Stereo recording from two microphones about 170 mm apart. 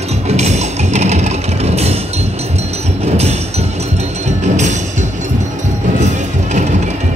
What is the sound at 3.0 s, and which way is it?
Music, 40° right (ahead or behind).